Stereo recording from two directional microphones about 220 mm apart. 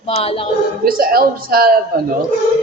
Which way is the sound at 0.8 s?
40° right (ahead or behind).